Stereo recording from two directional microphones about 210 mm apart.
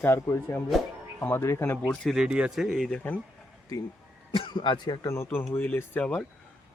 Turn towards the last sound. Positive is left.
turn(degrees=5)  # may be behind; listen again after turning